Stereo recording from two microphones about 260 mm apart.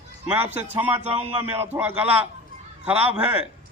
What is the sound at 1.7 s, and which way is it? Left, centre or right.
A man's voice, centre.